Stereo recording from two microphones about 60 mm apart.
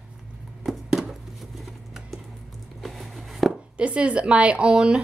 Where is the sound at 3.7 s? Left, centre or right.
Centre.